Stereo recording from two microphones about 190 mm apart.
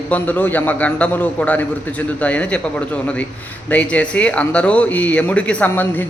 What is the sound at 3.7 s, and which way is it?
Speech, 5° left (ahead or behind).